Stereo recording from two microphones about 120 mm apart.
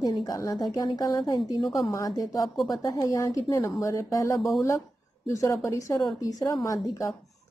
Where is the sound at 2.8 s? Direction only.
25° left (ahead or behind).